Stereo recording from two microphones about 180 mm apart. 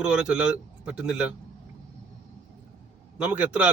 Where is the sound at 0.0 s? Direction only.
5° right (ahead or behind).